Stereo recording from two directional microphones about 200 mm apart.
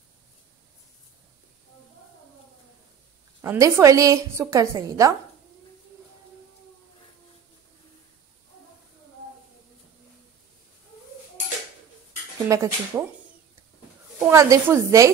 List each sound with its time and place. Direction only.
3.4 s a woman's voice: 15° right (ahead or behind)
12.4 s a woman's voice: 15° right (ahead or behind)
14.2 s a woman's voice: 15° right (ahead or behind)